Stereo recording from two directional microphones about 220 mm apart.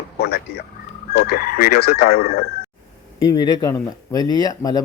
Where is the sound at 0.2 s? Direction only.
45° left (ahead or behind).